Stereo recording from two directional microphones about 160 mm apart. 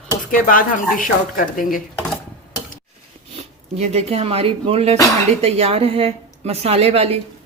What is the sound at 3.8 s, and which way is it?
Speech, 40° right (ahead or behind).